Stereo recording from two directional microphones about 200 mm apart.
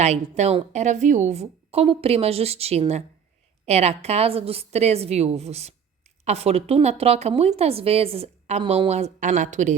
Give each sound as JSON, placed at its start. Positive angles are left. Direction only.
{"t": 0.0, "sound": "speech", "side_deg": -35}